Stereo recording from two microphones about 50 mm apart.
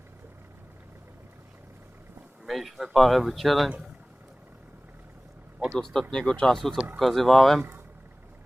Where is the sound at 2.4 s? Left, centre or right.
Centre.